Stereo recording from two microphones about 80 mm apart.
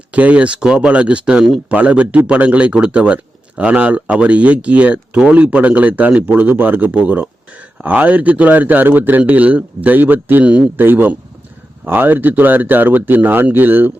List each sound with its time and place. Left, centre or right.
0.1 s speech: centre
1.7 s a man's voice: centre